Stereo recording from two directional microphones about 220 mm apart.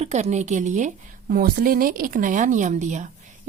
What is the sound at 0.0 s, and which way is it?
A woman's voice, 30° right (ahead or behind).